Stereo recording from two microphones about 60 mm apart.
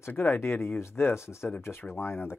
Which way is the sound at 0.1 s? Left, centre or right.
Left.